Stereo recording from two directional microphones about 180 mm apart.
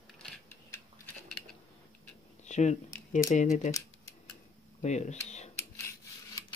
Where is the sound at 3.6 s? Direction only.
15° left (ahead or behind).